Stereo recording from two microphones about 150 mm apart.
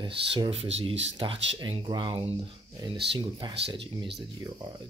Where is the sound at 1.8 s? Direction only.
30° right (ahead or behind).